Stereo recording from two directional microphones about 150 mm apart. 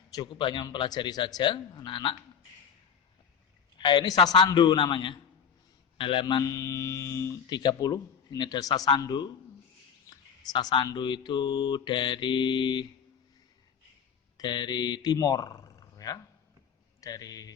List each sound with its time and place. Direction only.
0.1 s mantra: 30° left (ahead or behind)
3.8 s mantra: 30° left (ahead or behind)
6.0 s speech: 35° left (ahead or behind)
10.5 s mantra: 30° left (ahead or behind)
14.3 s speech: 30° left (ahead or behind)